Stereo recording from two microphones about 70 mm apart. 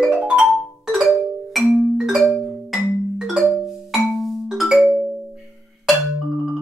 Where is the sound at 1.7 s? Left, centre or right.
Centre.